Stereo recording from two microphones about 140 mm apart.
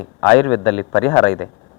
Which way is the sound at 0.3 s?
15° left (ahead or behind).